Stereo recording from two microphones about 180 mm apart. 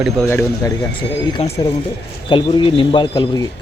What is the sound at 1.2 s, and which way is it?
Speech, 25° left (ahead or behind).